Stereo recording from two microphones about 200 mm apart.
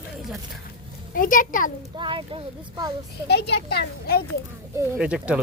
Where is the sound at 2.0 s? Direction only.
25° right (ahead or behind).